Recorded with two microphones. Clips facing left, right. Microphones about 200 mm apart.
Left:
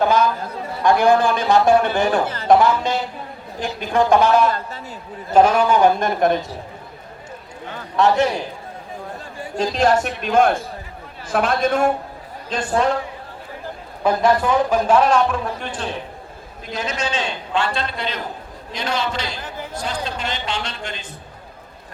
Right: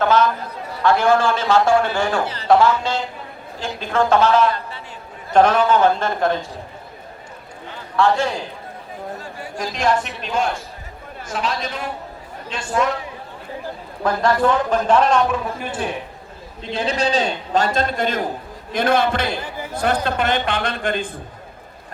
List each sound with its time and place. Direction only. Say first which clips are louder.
0.0 s a man's voice: even; 15° left (ahead or behind)
2.2 s speech: left 2 dB; 50° left (ahead or behind)
2.5 s a man's voice: even; 15° left (ahead or behind)
7.9 s a man's voice: left 1 dB; 20° left (ahead or behind)
9.6 s a man's voice: left 3 dB; 35° left (ahead or behind)
12.5 s a man's voice: left 7 dB; 40° left (ahead or behind)
14.0 s a man's voice: left 1 dB; 15° left (ahead or behind)
15.5 s speech: right 2 dB; 5° right (ahead or behind)
16.7 s a man's voice: right 5 dB; 35° right (ahead or behind); by 19.4 s 55° right (ahead or behind)
19.4 s speech: right 2 dB; 10° right (ahead or behind)
19.7 s a man's voice: right 8 dB; 60° right (ahead or behind)